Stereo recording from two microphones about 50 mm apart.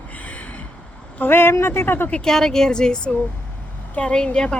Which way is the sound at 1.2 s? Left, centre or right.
Left.